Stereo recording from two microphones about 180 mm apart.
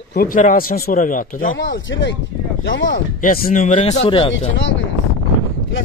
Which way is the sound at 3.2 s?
50° left (ahead or behind).